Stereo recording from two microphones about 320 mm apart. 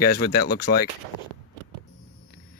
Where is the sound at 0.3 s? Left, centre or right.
Left.